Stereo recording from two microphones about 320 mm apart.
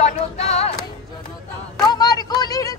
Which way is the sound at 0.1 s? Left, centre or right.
Centre.